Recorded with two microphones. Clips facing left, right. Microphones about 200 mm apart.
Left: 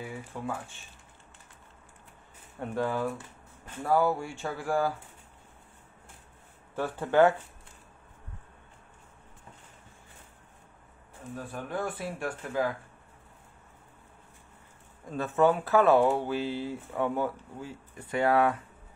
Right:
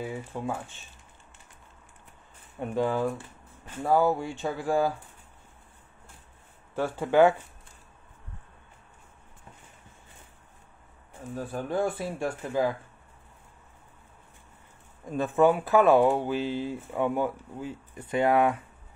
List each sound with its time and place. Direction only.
0.0 s speech: 25° right (ahead or behind)
2.7 s speech: 15° right (ahead or behind)
6.7 s speech: 15° right (ahead or behind)
11.3 s speech: 30° right (ahead or behind)
15.1 s speech: 15° right (ahead or behind)